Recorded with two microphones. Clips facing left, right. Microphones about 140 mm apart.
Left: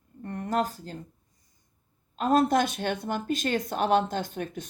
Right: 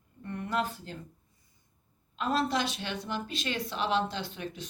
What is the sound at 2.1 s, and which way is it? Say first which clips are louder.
A woman's voice: left 7 dB; 45° left (ahead or behind).